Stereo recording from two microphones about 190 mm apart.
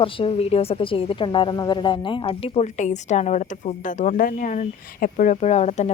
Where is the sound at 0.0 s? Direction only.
30° left (ahead or behind).